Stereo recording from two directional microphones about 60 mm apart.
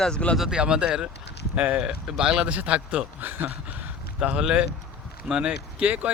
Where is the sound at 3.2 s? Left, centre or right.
Right.